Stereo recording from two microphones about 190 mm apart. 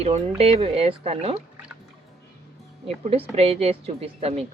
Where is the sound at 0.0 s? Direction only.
30° right (ahead or behind).